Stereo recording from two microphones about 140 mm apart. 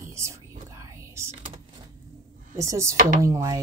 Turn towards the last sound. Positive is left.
turn(degrees=-20)  # may be behind; listen again after turning